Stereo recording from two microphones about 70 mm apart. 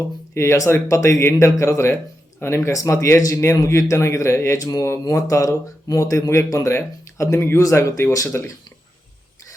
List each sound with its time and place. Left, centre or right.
0.3 s speech: left
4.5 s speech: left